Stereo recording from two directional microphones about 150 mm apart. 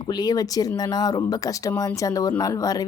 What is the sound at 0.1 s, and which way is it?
Speech, 25° left (ahead or behind).